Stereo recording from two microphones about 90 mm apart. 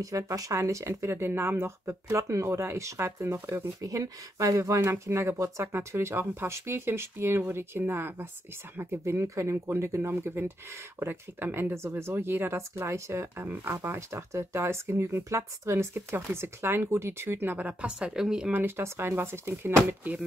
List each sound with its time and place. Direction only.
0.0 s speech: 40° right (ahead or behind); by 3.6 s 25° right (ahead or behind)
3.8 s speech: 40° right (ahead or behind); by 18.5 s 5° right (ahead or behind)
18.5 s speech: 25° right (ahead or behind)